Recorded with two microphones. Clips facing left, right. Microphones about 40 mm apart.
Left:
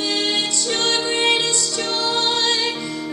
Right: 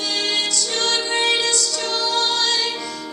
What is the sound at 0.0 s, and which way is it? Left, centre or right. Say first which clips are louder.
Music: left 1 dB; centre.